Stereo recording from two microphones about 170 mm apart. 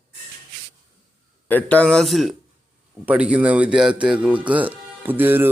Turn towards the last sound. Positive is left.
turn(degrees=-10)  # may be behind; listen again after turning